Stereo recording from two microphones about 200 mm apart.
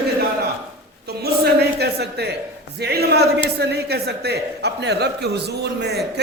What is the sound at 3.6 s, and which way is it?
Speech, 55° right (ahead or behind).